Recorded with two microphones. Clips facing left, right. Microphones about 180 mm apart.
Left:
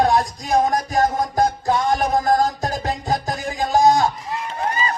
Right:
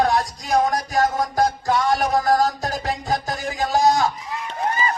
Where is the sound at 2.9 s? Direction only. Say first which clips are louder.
Even; 45° left (ahead or behind).